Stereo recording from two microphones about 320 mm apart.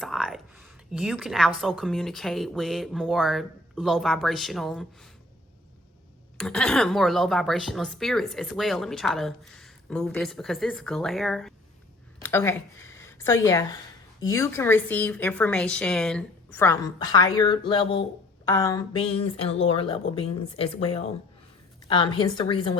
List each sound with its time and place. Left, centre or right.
0.0 s a sound: centre
0.9 s a woman's voice: centre
6.3 s a woman's voice: centre